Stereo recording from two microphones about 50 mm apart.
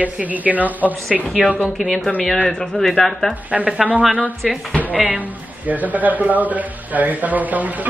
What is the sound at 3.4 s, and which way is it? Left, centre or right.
Speech, right.